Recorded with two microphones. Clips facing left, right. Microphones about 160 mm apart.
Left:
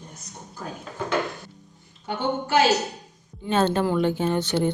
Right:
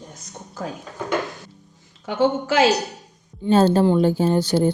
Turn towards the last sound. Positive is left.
turn(degrees=-35)  # may be behind; listen again after turning